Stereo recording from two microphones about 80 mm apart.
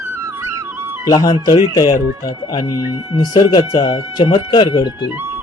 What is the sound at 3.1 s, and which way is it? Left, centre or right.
Speech, left.